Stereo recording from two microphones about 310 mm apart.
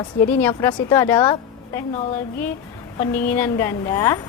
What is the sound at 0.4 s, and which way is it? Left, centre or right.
A woman's voice, centre.